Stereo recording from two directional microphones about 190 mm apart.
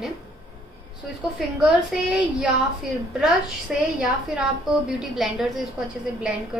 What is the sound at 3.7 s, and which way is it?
Speech, centre (ahead or behind).